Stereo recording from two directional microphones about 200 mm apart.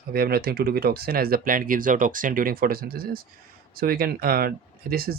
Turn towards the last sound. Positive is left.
turn(degrees=-50)  # may be behind; listen again after turning